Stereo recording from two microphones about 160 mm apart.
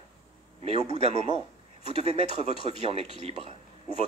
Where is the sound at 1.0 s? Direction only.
40° right (ahead or behind).